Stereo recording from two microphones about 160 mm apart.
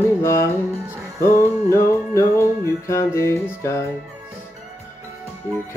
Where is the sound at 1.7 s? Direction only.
15° left (ahead or behind).